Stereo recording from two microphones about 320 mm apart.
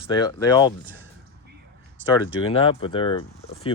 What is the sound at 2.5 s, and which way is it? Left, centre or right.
Speech, centre.